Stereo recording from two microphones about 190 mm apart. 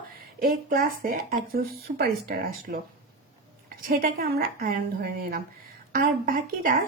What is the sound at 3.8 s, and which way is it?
Speech, 50° right (ahead or behind).